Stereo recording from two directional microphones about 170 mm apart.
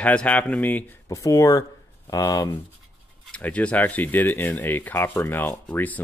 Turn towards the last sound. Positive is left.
turn(degrees=10)  # may be behind; listen again after turning